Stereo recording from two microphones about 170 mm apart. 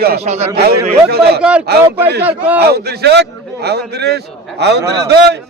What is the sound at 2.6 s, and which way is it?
A man's voice, 70° right (ahead or behind).